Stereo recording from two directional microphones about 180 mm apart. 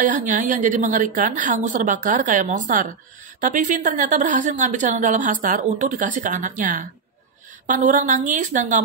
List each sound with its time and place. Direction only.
0.0 s a woman's voice: 45° right (ahead or behind)